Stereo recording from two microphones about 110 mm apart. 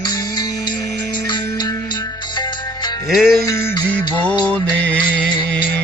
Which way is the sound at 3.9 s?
10° left (ahead or behind).